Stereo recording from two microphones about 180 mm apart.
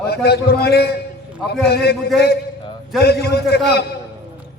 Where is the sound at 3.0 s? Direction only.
65° left (ahead or behind).